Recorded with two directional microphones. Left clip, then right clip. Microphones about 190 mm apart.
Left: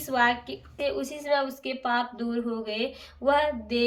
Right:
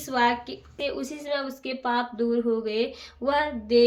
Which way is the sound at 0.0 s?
35° right (ahead or behind).